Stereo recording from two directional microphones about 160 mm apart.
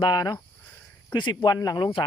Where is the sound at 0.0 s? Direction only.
25° left (ahead or behind).